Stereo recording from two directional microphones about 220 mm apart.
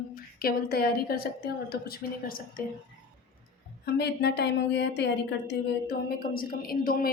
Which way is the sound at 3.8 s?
50° left (ahead or behind).